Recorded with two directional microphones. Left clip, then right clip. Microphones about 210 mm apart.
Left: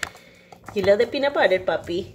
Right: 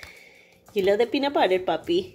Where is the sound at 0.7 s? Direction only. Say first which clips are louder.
Left 3 dB; 20° right (ahead or behind).